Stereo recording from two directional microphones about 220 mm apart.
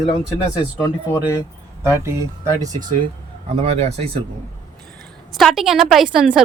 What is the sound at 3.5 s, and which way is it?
Speech, 30° right (ahead or behind).